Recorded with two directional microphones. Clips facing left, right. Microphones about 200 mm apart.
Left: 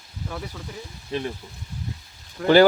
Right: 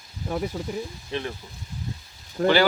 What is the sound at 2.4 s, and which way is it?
Speech, 40° right (ahead or behind).